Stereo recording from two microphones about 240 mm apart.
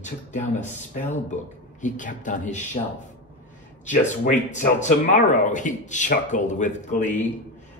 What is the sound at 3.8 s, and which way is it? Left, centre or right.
Speech, left.